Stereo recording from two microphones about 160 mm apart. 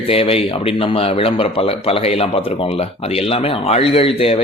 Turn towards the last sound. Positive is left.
turn(degrees=35)  # may be behind; listen again after turning